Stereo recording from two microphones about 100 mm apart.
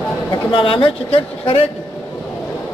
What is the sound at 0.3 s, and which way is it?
Speech, 60° left (ahead or behind).